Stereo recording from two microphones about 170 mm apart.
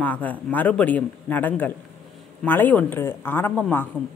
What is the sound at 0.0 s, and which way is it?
A woman's voice, 10° left (ahead or behind).